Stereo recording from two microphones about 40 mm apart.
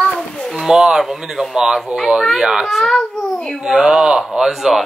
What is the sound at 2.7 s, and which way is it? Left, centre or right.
Speech, centre.